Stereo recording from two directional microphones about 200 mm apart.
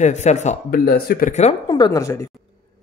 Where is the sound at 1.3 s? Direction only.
35° left (ahead or behind).